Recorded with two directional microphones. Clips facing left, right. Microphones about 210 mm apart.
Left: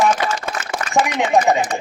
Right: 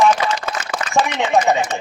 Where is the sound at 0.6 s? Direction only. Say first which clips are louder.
Even; 35° left (ahead or behind).